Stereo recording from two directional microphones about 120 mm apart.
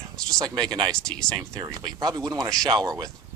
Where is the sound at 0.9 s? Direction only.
5° left (ahead or behind).